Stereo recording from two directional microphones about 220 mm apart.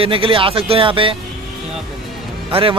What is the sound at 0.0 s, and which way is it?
Speech, 25° right (ahead or behind).